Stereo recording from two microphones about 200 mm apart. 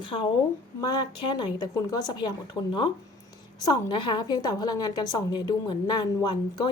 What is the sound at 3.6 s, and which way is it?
A woman's voice, 20° left (ahead or behind).